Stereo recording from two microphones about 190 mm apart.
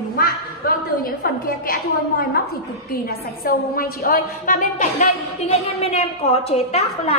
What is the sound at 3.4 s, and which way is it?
A woman's voice, 50° left (ahead or behind).